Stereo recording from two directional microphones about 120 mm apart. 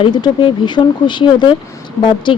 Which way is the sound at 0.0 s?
40° left (ahead or behind).